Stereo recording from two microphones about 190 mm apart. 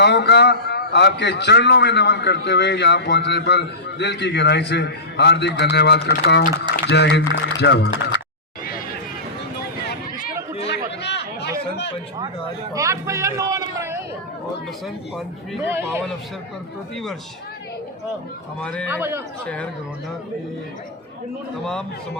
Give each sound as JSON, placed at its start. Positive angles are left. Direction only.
{"t": 0.0, "sound": "a man's voice", "side_deg": 65}
{"t": 10.7, "sound": "chatter", "side_deg": 65}
{"t": 12.7, "sound": "a man's voice", "side_deg": -15}
{"t": 15.7, "sound": "a man's voice", "side_deg": -15}
{"t": 18.6, "sound": "a man's voice", "side_deg": 5}
{"t": 18.9, "sound": "a man's voice", "side_deg": -10}
{"t": 21.6, "sound": "speech", "side_deg": 0}